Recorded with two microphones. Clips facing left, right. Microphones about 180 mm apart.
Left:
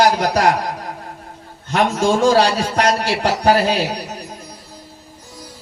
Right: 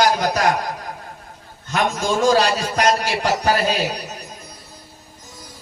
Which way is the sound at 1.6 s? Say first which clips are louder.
Left 4 dB; 30° left (ahead or behind).